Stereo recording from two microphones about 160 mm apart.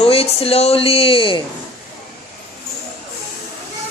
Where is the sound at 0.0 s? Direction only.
35° left (ahead or behind).